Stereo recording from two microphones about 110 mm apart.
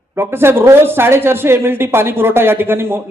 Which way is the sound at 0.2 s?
20° right (ahead or behind).